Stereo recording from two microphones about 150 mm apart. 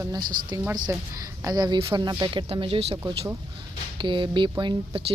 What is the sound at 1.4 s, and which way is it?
A woman's voice, 25° right (ahead or behind).